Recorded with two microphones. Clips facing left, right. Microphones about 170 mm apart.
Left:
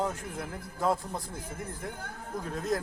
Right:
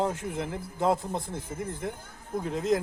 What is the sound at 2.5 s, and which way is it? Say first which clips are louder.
Speech: right 5 dB; 20° right (ahead or behind).